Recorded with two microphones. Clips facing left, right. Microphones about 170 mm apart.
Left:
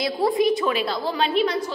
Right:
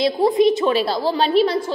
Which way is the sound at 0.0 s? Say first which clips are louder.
Right 5 dB; 25° right (ahead or behind).